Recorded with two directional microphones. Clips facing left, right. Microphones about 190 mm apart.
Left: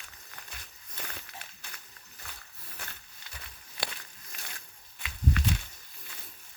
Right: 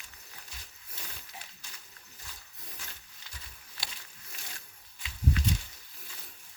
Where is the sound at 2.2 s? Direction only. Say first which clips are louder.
Left 3 dB; 60° left (ahead or behind).